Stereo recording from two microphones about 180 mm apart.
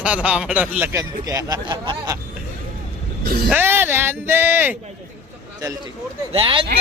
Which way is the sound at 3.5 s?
10° right (ahead or behind).